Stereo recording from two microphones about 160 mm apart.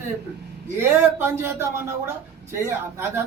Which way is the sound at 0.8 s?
15° right (ahead or behind).